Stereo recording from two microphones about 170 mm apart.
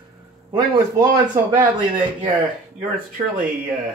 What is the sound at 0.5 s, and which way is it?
Speech, 25° right (ahead or behind).